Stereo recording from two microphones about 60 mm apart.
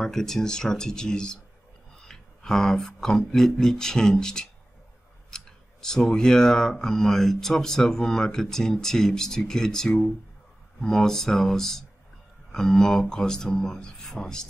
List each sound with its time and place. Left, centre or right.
0.0 s speech: centre